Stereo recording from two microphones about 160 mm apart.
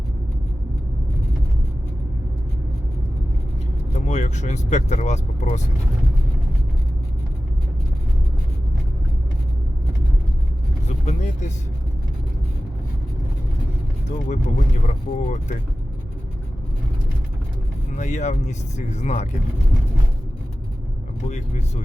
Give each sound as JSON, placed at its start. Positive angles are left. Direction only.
{"t": 3.9, "sound": "speech", "side_deg": 45}
{"t": 10.8, "sound": "vehicle", "side_deg": 45}
{"t": 14.3, "sound": "speech", "side_deg": 45}
{"t": 17.9, "sound": "speech", "side_deg": 45}